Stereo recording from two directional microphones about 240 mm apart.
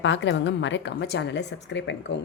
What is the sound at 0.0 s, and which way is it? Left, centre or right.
A woman's voice, left.